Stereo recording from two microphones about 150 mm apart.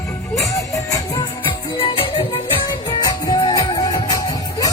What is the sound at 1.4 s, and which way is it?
Music, 35° left (ahead or behind).